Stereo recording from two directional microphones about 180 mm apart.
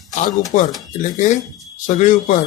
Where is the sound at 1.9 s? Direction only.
45° left (ahead or behind).